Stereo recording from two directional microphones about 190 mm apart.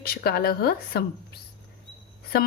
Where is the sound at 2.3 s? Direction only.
55° left (ahead or behind).